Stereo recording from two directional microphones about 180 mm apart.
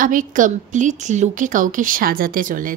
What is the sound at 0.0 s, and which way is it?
Speech, 45° right (ahead or behind).